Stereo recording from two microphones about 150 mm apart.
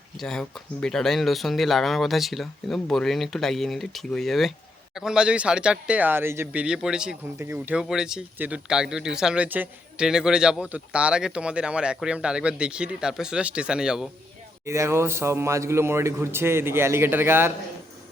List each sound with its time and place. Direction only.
0.2 s speech: 5° left (ahead or behind)
7.3 s speech: 15° right (ahead or behind)
14.6 s speech: 20° right (ahead or behind)